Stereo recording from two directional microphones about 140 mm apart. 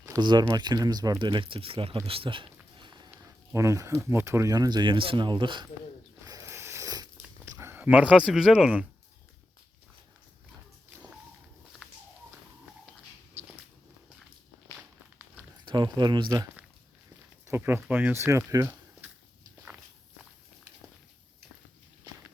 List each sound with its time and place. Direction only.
0.2 s speech: 30° right (ahead or behind)
2.0 s a sound: 40° right (ahead or behind)
3.5 s speech: 20° right (ahead or behind)
6.2 s biting: 20° right (ahead or behind)
7.4 s speech: 20° right (ahead or behind)
15.6 s speech: 30° right (ahead or behind)
17.4 s speech: 15° right (ahead or behind)